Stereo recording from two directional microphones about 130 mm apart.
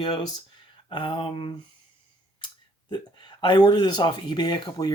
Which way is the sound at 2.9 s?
35° left (ahead or behind).